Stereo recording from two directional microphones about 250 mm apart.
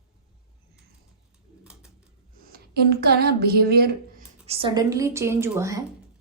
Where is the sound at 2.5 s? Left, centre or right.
Right.